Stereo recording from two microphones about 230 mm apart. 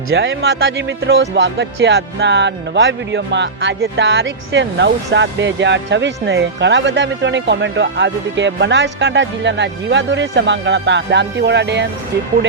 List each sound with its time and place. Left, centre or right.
0.1 s speech: right